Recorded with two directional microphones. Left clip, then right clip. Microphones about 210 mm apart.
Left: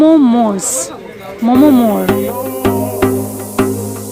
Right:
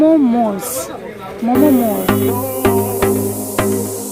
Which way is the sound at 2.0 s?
Centre (ahead or behind).